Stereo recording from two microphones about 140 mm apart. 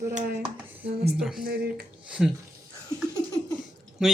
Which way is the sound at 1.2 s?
Centre (ahead or behind).